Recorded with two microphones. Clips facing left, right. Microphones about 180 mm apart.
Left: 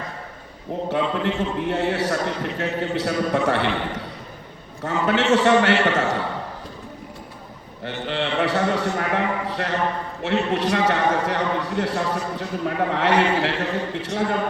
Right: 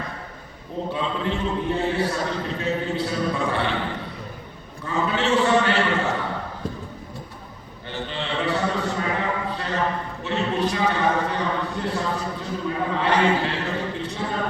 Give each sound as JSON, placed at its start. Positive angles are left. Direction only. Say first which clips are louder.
{"t": 0.9, "sound": "a man's voice", "louder": "left 4 dB", "side_deg": 80}
{"t": 7.9, "sound": "a sound", "louder": "left 4 dB", "side_deg": 80}
{"t": 10.2, "sound": "a man's voice", "louder": "left 3 dB", "side_deg": 90}